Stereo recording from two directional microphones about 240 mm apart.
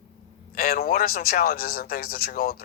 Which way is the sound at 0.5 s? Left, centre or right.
Left.